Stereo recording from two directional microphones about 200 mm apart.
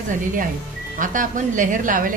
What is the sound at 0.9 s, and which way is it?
A woman's voice, 40° right (ahead or behind).